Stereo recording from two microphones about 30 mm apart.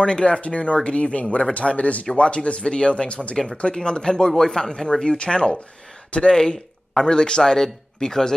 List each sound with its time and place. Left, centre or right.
0.0 s speech: left
0.4 s speech: left; by 4.8 s centre
5.0 s speech: left; by 7.2 s centre
7.2 s speech: left